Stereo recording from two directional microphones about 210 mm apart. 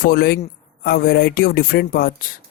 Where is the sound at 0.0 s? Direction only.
45° left (ahead or behind).